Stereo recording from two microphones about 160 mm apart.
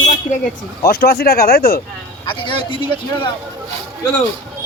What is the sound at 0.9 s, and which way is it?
Speech, 70° left (ahead or behind).